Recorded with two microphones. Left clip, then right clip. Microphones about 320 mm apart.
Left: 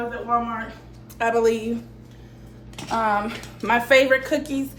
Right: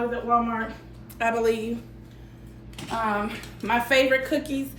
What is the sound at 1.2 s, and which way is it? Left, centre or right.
Speech, centre.